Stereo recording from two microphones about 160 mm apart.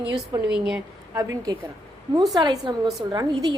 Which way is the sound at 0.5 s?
5° right (ahead or behind).